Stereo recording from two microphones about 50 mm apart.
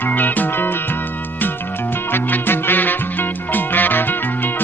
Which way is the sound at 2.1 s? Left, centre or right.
Left.